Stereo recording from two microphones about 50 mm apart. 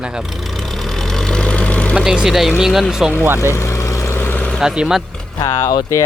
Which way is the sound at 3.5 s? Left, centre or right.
Left.